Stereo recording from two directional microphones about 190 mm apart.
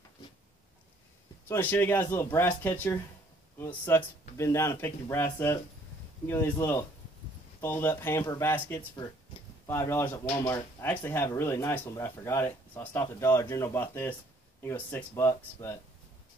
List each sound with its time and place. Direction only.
1.5 s speech: 10° left (ahead or behind)